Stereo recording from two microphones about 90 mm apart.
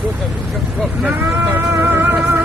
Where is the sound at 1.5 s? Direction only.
20° right (ahead or behind).